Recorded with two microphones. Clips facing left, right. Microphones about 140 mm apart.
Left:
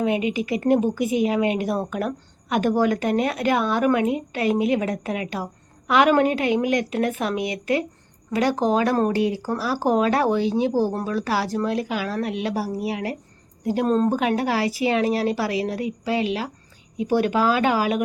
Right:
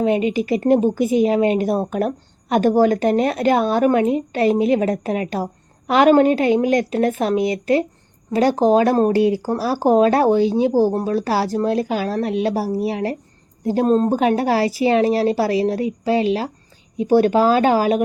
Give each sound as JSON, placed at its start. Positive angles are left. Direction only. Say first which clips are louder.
{"t": 0.0, "sound": "a woman's voice", "louder": "right 4 dB", "side_deg": -35}